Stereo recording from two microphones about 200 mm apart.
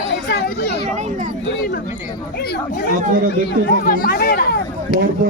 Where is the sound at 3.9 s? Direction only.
45° left (ahead or behind).